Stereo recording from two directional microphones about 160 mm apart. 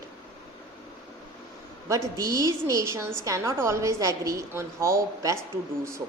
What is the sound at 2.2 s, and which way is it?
A woman's voice, 20° right (ahead or behind).